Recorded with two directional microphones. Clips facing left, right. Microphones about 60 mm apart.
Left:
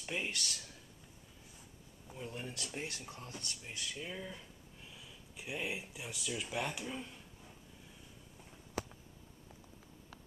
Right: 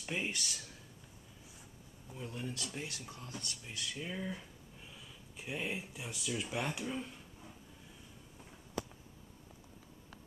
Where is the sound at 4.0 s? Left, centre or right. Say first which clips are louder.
Right 3 dB; centre.